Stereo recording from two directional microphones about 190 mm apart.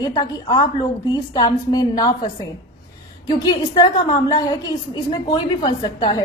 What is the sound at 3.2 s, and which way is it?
A woman's voice, 20° left (ahead or behind).